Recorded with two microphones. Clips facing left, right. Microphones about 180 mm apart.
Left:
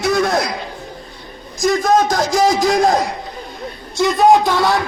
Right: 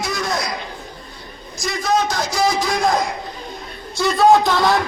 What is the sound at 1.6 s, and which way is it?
A man's voice, 50° left (ahead or behind).